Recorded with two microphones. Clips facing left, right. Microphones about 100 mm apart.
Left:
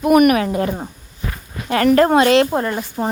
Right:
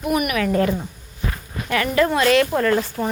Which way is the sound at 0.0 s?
55° left (ahead or behind).